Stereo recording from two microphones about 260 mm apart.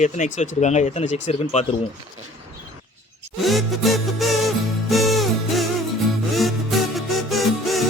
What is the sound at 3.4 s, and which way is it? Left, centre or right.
Music, centre.